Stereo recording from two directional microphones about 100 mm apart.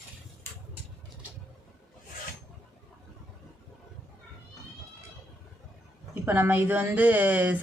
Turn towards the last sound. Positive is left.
turn(degrees=-15)  # may be behind; listen again after turning